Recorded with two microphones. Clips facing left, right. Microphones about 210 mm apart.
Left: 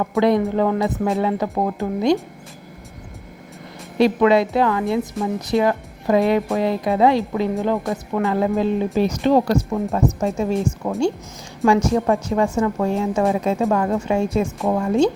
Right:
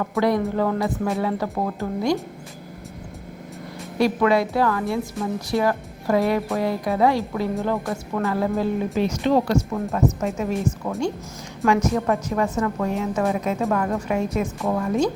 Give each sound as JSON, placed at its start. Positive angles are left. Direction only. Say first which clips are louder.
{"t": 0.2, "sound": "a woman's voice", "louder": "left 4 dB", "side_deg": 25}
{"t": 3.9, "sound": "a woman's voice", "louder": "left 4 dB", "side_deg": 25}
{"t": 9.0, "sound": "a woman's voice", "louder": "left 3 dB", "side_deg": 40}